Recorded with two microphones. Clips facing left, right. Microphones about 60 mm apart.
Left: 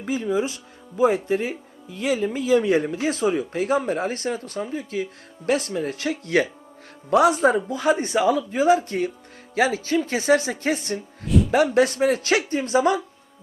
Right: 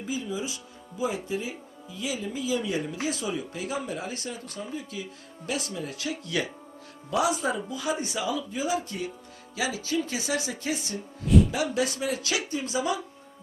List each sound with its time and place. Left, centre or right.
0.0 s speech: left
11.3 s music: centre
11.5 s speech: left